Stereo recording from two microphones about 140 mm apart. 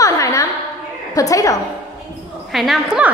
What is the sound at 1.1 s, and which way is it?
Speech, 25° left (ahead or behind).